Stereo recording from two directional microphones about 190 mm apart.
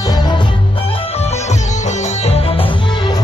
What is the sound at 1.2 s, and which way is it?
Music, 35° left (ahead or behind).